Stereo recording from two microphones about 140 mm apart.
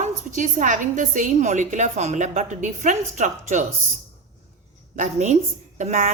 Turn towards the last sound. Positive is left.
turn(degrees=-60)  # may be behind; listen again after turning